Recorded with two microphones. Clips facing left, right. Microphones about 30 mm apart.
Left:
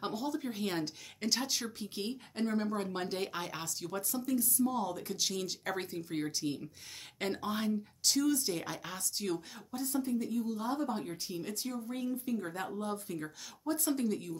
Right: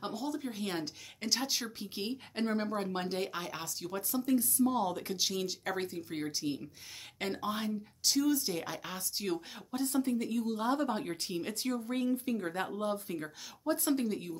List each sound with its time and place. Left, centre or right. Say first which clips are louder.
0.1 s speech: left 1 dB; centre
2.3 s speech: even; right
2.8 s speech: right 1 dB; centre
4.3 s speech: right 3 dB; right
5.1 s speech: right 2 dB; centre
9.7 s speech: right 3 dB; right
12.8 s speech: right 3 dB; centre